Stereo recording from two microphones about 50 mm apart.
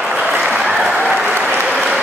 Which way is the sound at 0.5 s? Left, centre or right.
Right.